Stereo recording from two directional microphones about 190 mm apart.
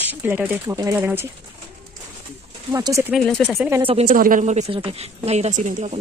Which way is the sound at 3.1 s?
5° right (ahead or behind).